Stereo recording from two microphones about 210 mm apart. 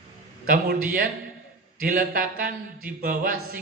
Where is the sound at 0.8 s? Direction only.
40° right (ahead or behind).